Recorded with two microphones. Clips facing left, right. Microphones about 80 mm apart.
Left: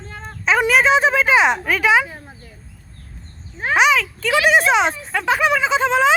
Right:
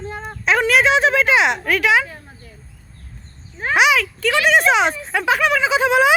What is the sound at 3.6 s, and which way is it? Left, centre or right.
Speech, centre.